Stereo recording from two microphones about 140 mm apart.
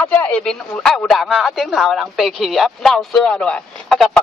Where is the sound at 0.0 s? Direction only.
10° left (ahead or behind).